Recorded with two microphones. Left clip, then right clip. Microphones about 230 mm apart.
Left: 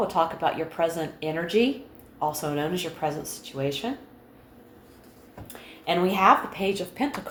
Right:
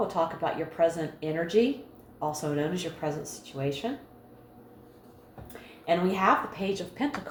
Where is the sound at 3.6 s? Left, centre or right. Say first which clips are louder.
Left 3 dB; left.